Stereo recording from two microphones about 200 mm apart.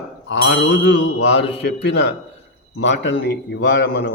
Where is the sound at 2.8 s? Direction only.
65° left (ahead or behind).